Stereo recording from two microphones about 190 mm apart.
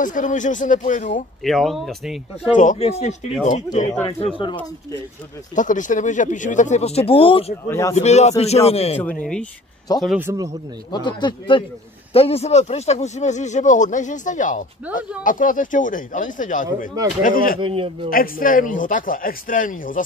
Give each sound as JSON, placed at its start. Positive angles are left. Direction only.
{"t": 0.0, "sound": "speech", "side_deg": 45}
{"t": 1.4, "sound": "speech", "side_deg": 0}
{"t": 2.4, "sound": "speech", "side_deg": 40}
{"t": 5.6, "sound": "speech", "side_deg": 45}
{"t": 7.6, "sound": "speech", "side_deg": 15}
{"t": 7.9, "sound": "speech", "side_deg": 35}
{"t": 9.2, "sound": "speech", "side_deg": 5}
{"t": 10.0, "sound": "a man's voice", "side_deg": -10}
{"t": 10.9, "sound": "speech", "side_deg": 25}
{"t": 17.6, "sound": "a man's voice", "side_deg": -30}
{"t": 18.1, "sound": "speech", "side_deg": 45}